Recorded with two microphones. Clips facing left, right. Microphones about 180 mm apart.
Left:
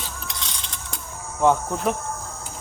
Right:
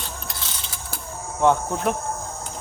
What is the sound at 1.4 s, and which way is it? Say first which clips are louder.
Cricket: even; centre (ahead or behind).